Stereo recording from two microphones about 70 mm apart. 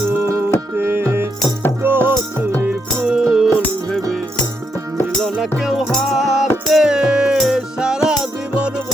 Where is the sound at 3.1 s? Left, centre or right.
Centre.